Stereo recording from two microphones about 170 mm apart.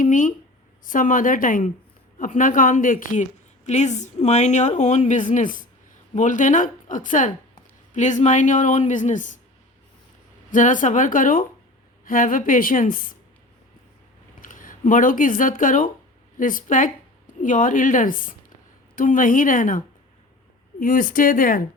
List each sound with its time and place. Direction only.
0.0 s speech: 50° left (ahead or behind)
10.5 s speech: 50° left (ahead or behind)
14.4 s speech: 50° left (ahead or behind)